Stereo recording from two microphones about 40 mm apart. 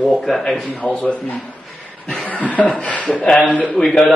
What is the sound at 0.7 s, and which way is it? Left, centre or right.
Speech, left.